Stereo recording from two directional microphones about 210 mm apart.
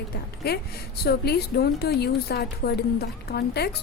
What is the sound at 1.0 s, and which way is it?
Speech, 50° left (ahead or behind).